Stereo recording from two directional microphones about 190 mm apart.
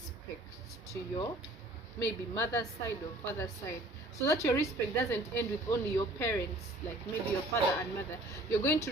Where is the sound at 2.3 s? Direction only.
15° left (ahead or behind).